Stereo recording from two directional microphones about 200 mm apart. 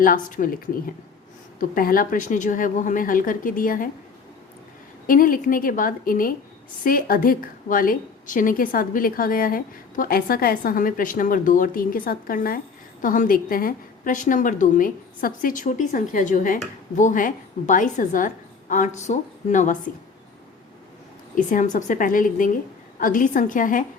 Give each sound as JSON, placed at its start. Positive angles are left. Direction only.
{"t": 0.0, "sound": "a woman's voice", "side_deg": 45}
{"t": 5.0, "sound": "a woman's voice", "side_deg": 45}
{"t": 21.3, "sound": "a woman's voice", "side_deg": 40}